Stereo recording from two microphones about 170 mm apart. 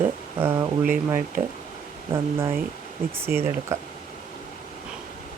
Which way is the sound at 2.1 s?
15° right (ahead or behind).